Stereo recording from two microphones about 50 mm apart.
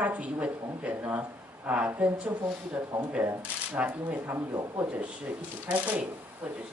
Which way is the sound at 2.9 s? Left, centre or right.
Right.